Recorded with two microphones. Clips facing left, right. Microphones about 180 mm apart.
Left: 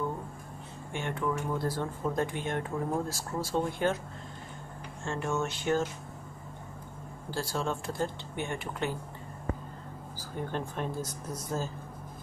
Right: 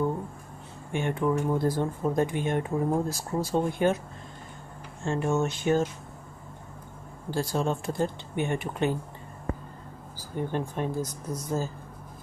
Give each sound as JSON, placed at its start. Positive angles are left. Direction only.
{"t": 0.9, "sound": "speech", "side_deg": -15}
{"t": 5.0, "sound": "speech", "side_deg": -20}
{"t": 7.2, "sound": "speech", "side_deg": -20}
{"t": 10.4, "sound": "speech", "side_deg": -15}